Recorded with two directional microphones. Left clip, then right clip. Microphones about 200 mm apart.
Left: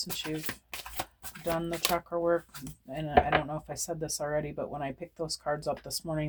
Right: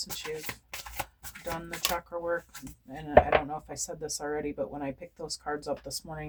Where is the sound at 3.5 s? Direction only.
40° left (ahead or behind).